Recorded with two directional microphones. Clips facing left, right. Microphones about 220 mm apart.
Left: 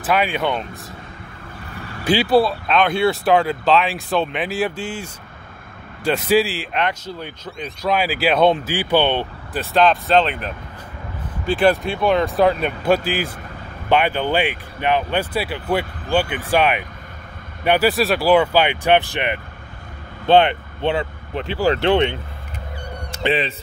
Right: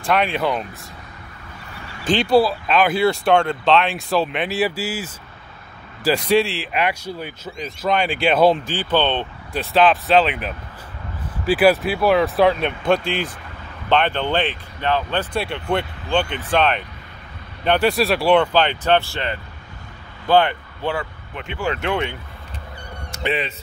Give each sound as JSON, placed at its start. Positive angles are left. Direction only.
{"t": 0.0, "sound": "speech", "side_deg": 0}
{"t": 2.0, "sound": "speech", "side_deg": 5}
{"t": 8.6, "sound": "speech", "side_deg": 10}
{"t": 21.4, "sound": "speech", "side_deg": 35}